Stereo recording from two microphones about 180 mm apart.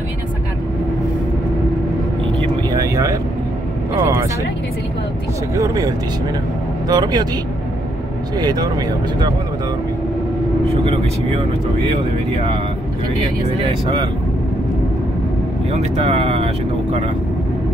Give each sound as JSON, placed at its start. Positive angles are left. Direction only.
{"t": 2.4, "sound": "vehicle", "side_deg": -20}
{"t": 5.6, "sound": "speech", "side_deg": -20}
{"t": 8.4, "sound": "speech", "side_deg": -20}
{"t": 16.1, "sound": "speech", "side_deg": -30}